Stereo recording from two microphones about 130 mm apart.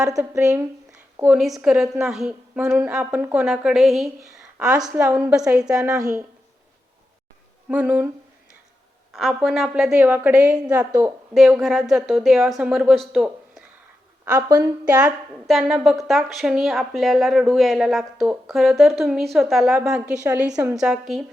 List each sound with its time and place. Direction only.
0.0 s a woman's voice: 20° right (ahead or behind); by 2.6 s 5° right (ahead or behind)
2.6 s a woman's voice: 15° right (ahead or behind); by 4.4 s centre (ahead or behind)
5.0 s a woman's voice: 15° right (ahead or behind)
5.8 s a woman's voice: 25° right (ahead or behind)
7.7 s speech: 10° right (ahead or behind)
9.1 s a woman's voice: centre (ahead or behind)
10.7 s a woman's voice: 25° right (ahead or behind)
11.0 s a woman's voice: centre (ahead or behind)
14.3 s a woman's voice: 25° right (ahead or behind)
14.8 s a woman's voice: 10° right (ahead or behind)